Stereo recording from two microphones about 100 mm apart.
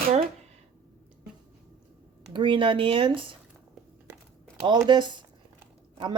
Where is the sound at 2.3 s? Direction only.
55° right (ahead or behind).